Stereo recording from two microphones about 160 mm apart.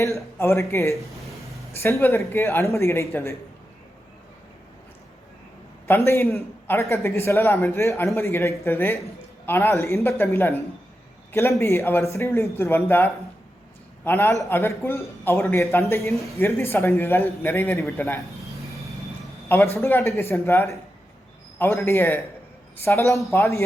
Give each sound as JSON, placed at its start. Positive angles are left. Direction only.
{"t": 0.3, "sound": "a man's voice", "side_deg": 15}
{"t": 6.1, "sound": "a man's voice", "side_deg": 15}
{"t": 19.5, "sound": "a man's voice", "side_deg": 15}